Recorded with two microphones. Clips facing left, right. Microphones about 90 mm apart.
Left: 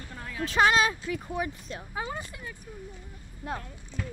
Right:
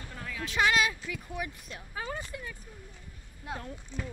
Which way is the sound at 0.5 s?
35° left (ahead or behind).